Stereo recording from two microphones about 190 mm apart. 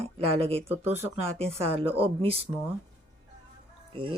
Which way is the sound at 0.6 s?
10° right (ahead or behind).